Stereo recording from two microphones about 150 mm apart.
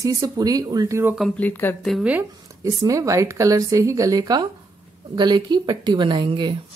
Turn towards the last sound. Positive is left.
turn(degrees=-30)  # may be behind; listen again after turning